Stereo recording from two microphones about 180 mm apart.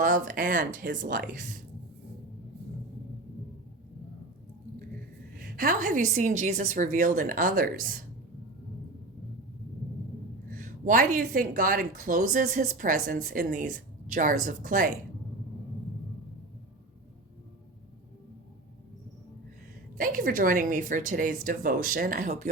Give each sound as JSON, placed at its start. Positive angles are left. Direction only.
{"t": 0.0, "sound": "speech", "side_deg": -50}
{"t": 5.3, "sound": "speech", "side_deg": -55}
{"t": 10.5, "sound": "speech", "side_deg": -50}
{"t": 20.0, "sound": "speech", "side_deg": -50}